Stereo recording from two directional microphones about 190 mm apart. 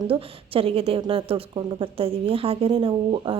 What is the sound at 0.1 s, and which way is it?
A woman's voice, 30° right (ahead or behind).